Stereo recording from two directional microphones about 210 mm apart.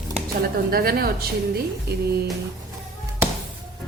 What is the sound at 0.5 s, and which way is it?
A woman's voice, 45° right (ahead or behind).